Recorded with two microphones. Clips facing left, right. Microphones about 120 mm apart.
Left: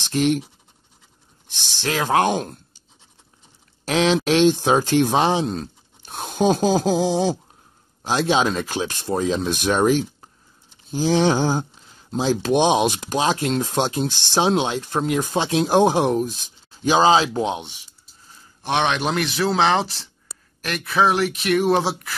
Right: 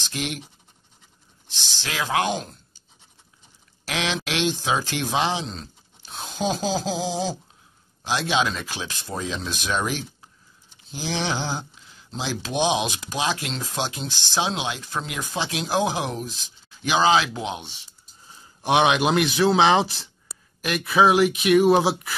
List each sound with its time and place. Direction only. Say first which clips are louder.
0.0 s speech: left 11 dB; 40° left (ahead or behind)
1.9 s speech: left 5 dB; 45° left (ahead or behind)
3.8 s speech: left 9 dB; 35° left (ahead or behind); by 7.3 s 60° left (ahead or behind)
8.0 s speech: left 4 dB; 40° left (ahead or behind)
8.6 s speech: left 8 dB; 50° left (ahead or behind)
9.0 s speech: left 9 dB; 35° left (ahead or behind)
9.5 s speech: left 8 dB; 50° left (ahead or behind)
13.2 s speech: left 6 dB; 40° left (ahead or behind)
13.6 s speech: left 8 dB; 50° left (ahead or behind)
16.8 s speech: left 4 dB; 35° left (ahead or behind)
17.6 s speech: left 5 dB; 15° left (ahead or behind)
18.6 s speech: right 2 dB; 10° right (ahead or behind)